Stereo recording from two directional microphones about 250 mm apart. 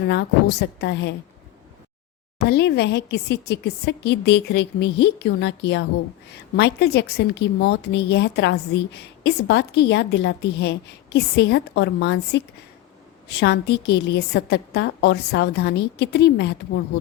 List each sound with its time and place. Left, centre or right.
0.1 s a woman's voice: left
2.4 s speech: left